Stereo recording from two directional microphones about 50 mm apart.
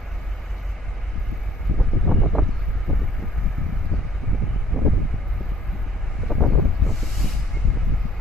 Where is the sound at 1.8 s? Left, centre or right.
Centre.